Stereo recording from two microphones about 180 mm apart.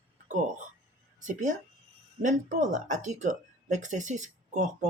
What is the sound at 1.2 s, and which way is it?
A woman's voice, 45° right (ahead or behind).